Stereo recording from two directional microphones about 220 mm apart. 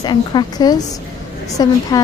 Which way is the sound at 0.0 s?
20° left (ahead or behind).